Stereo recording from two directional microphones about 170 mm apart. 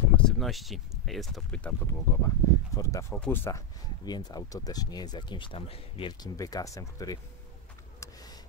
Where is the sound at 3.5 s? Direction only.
20° left (ahead or behind).